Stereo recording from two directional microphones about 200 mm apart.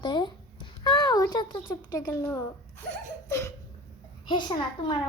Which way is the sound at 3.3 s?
15° left (ahead or behind).